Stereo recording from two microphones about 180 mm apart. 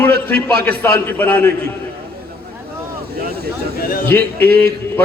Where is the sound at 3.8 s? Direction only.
55° left (ahead or behind).